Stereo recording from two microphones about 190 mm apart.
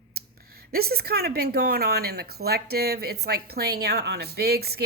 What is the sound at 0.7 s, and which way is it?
A woman's voice, 55° right (ahead or behind).